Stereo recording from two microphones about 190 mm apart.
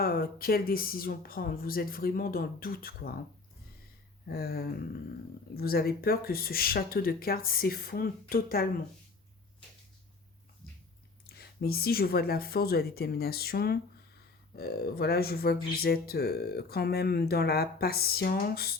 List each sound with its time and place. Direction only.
0.0 s speech: 50° left (ahead or behind)
4.3 s speech: 55° left (ahead or behind)
11.3 s speech: 55° left (ahead or behind)